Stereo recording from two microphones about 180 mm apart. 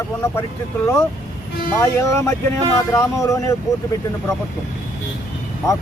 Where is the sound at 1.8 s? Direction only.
15° left (ahead or behind).